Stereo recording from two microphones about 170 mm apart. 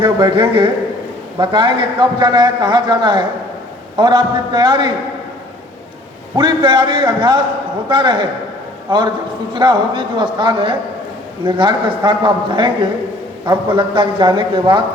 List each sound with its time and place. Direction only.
0.0 s a man's voice: 30° right (ahead or behind)
6.3 s a man's voice: 30° right (ahead or behind)